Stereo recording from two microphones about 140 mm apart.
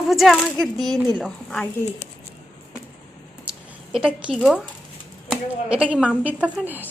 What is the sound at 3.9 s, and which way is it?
A woman's voice, 5° right (ahead or behind).